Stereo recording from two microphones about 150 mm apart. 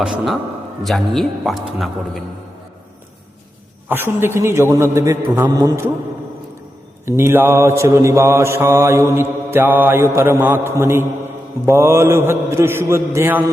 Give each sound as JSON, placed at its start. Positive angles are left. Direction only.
{"t": 0.0, "sound": "a man's voice", "side_deg": -5}
{"t": 3.8, "sound": "mantra", "side_deg": -15}
{"t": 5.5, "sound": "a man's voice", "side_deg": -20}
{"t": 7.0, "sound": "mantra", "side_deg": -15}